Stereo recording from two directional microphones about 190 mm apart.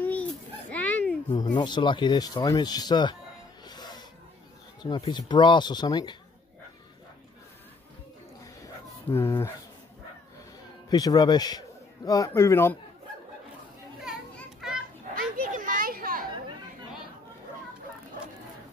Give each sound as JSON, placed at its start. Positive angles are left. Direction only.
{"t": 0.0, "sound": "children playing", "side_deg": 10}
{"t": 1.3, "sound": "speech", "side_deg": 25}
{"t": 3.6, "sound": "music", "side_deg": 20}
{"t": 4.8, "sound": "speech", "side_deg": 20}
{"t": 9.1, "sound": "speech", "side_deg": 10}
{"t": 10.9, "sound": "a man's voice", "side_deg": 20}
{"t": 14.0, "sound": "children playing", "side_deg": 0}
{"t": 15.1, "sound": "a sound", "side_deg": -45}